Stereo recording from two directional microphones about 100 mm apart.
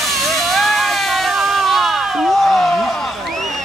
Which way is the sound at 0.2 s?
Centre (ahead or behind).